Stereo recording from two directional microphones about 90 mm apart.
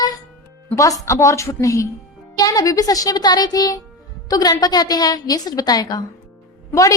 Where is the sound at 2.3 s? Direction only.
40° left (ahead or behind).